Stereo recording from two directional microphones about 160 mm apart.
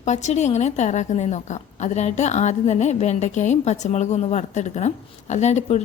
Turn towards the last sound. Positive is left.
turn(degrees=45)  # may be behind; listen again after turning